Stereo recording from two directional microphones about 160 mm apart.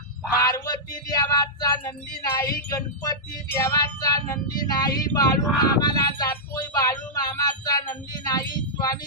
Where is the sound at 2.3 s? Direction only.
20° left (ahead or behind).